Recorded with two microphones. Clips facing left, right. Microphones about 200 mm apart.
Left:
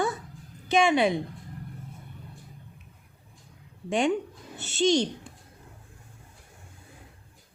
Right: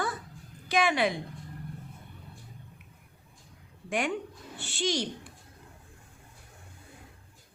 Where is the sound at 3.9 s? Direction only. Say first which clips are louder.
Left 6 dB; 25° left (ahead or behind).